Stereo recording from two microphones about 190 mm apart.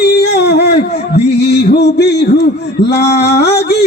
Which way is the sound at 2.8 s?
60° left (ahead or behind).